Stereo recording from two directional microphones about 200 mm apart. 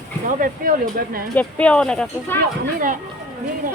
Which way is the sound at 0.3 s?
40° right (ahead or behind).